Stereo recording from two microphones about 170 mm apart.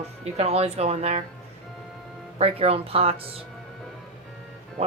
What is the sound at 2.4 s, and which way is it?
Speech, 35° right (ahead or behind).